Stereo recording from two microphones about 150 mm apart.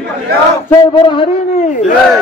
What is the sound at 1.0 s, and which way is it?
Speech, 30° left (ahead or behind).